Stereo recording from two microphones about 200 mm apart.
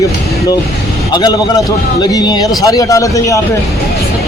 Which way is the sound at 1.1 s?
20° left (ahead or behind).